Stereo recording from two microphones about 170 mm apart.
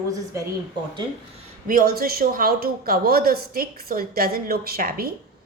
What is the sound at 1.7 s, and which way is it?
Speech, 60° right (ahead or behind).